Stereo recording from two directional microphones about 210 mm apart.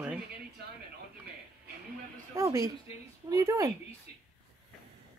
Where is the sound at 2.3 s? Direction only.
15° right (ahead or behind).